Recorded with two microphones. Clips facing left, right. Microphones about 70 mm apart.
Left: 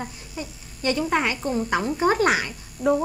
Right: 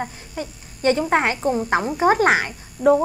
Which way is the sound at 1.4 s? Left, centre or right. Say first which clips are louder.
Right 4 dB; centre.